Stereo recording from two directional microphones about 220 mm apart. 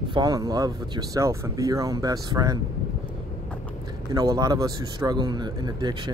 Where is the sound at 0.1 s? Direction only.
15° right (ahead or behind).